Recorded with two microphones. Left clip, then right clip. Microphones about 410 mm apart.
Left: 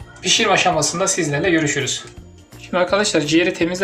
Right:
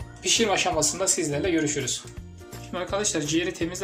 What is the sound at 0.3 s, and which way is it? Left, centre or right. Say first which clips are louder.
Speech: left 8 dB; left.